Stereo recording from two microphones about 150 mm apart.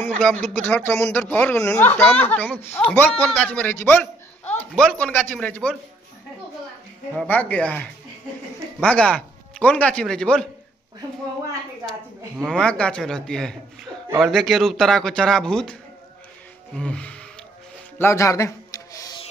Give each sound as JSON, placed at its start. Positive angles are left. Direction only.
{"t": 0.0, "sound": "speech", "side_deg": 10}
{"t": 7.2, "sound": "speech", "side_deg": 10}
{"t": 12.4, "sound": "speech", "side_deg": 5}
{"t": 16.7, "sound": "speech", "side_deg": 5}
{"t": 17.9, "sound": "music", "side_deg": 20}